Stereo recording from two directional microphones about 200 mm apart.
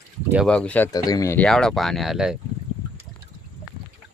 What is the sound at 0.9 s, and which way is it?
Speech, 20° left (ahead or behind).